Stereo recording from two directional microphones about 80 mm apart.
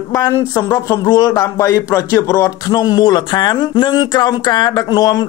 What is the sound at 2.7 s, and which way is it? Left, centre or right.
Speech, left.